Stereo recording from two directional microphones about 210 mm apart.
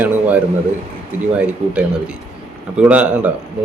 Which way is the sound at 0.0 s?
5° right (ahead or behind).